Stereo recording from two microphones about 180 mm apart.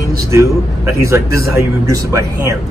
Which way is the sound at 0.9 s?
15° right (ahead or behind).